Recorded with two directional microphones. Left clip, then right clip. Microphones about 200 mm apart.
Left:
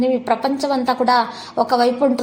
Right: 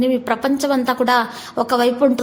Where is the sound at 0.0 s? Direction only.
30° right (ahead or behind).